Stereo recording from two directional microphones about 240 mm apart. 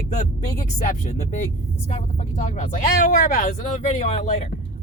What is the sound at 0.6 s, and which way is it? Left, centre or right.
Speech, left.